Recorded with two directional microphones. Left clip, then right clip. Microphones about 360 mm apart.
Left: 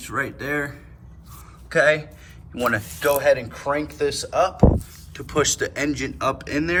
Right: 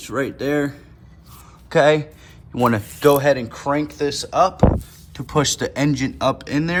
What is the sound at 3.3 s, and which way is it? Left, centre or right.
Speech, right.